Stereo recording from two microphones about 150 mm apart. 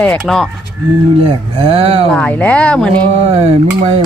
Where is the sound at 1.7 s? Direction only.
40° right (ahead or behind).